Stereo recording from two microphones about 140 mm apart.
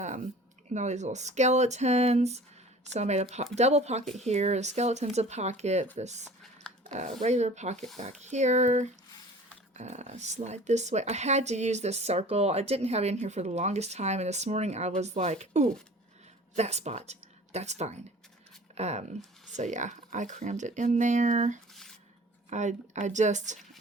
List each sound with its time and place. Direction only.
0.7 s speech: 55° right (ahead or behind)
6.4 s a sound: 5° left (ahead or behind)
6.8 s speech: 55° right (ahead or behind)